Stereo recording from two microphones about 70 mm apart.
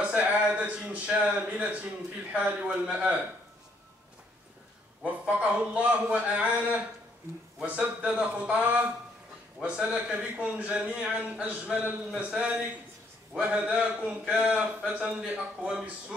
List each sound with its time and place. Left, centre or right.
0.0 s a sound: centre
1.4 s a man's voice: centre
5.3 s a man's voice: centre